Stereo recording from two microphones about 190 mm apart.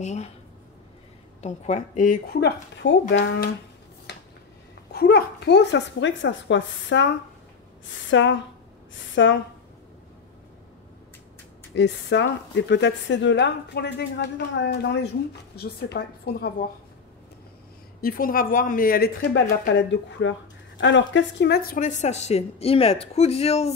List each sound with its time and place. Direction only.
0.0 s speech: 35° left (ahead or behind)
1.4 s speech: 40° left (ahead or behind); by 3.4 s 60° left (ahead or behind)
4.9 s a woman's voice: 55° left (ahead or behind); by 9.4 s 75° left (ahead or behind)
11.7 s a woman's voice: 65° left (ahead or behind)
18.0 s speech: 50° left (ahead or behind); by 23.7 s 35° left (ahead or behind)